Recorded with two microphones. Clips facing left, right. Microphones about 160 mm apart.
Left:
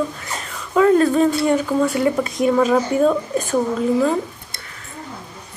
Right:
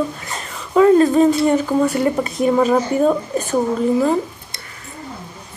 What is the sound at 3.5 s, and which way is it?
Speech, 10° right (ahead or behind).